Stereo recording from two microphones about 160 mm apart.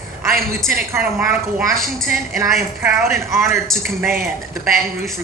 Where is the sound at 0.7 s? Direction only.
15° right (ahead or behind).